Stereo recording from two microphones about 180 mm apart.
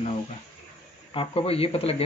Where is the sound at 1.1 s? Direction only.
30° left (ahead or behind).